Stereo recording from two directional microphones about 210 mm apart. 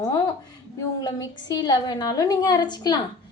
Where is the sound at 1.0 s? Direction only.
20° left (ahead or behind).